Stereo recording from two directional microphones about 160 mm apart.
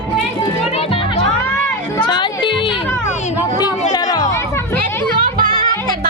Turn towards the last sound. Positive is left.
turn(degrees=25)  # may be behind; listen again after turning